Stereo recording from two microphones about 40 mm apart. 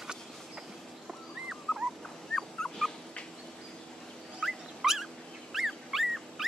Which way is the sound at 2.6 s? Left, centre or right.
Centre.